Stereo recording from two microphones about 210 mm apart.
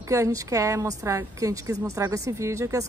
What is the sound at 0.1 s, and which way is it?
A woman's voice, 15° right (ahead or behind).